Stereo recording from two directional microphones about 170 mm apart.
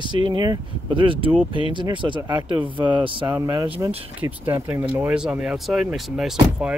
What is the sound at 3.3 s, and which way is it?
Speech, 20° right (ahead or behind).